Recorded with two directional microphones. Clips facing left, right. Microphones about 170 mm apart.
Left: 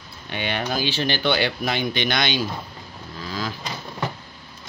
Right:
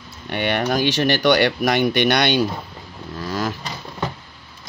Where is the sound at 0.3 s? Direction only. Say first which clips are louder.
Right 6 dB; 60° right (ahead or behind).